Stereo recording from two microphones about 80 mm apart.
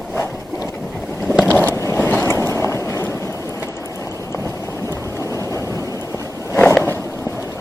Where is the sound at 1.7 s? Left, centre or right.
Left.